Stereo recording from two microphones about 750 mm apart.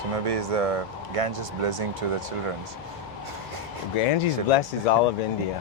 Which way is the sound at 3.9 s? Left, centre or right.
Left.